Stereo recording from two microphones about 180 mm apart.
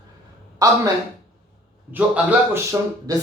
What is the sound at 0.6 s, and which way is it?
Speech, 20° right (ahead or behind).